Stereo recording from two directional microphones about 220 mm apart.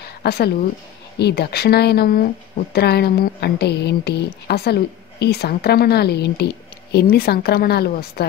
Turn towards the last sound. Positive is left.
turn(degrees=45)  # may be behind; listen again after turning